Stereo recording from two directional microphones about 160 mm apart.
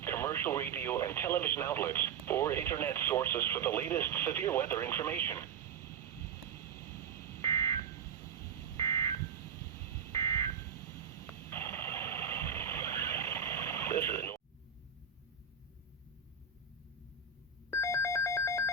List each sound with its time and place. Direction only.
0.0 s speech: 15° left (ahead or behind)
6.5 s vehicle: 15° left (ahead or behind)
7.3 s a sound: 20° left (ahead or behind)
9.7 s fire alarm: 20° left (ahead or behind)
11.1 s a sound: 15° left (ahead or behind)
17.7 s telephone bell ringing: 15° left (ahead or behind)